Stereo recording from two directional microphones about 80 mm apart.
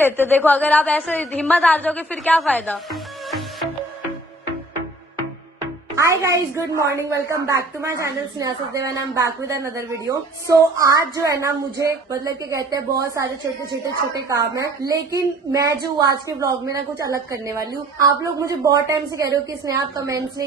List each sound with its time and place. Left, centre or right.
0.0 s a woman's voice: left
2.9 s music: centre
5.9 s a woman's voice: right